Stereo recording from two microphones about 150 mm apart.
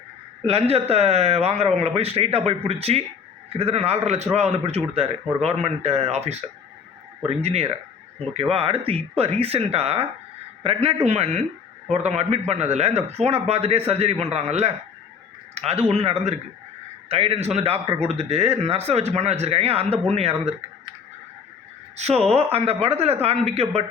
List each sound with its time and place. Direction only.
0.4 s speech: 40° right (ahead or behind)
21.9 s speech: 45° right (ahead or behind)